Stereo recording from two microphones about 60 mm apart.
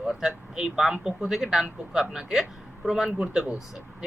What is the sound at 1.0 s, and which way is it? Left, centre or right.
A man's voice, centre.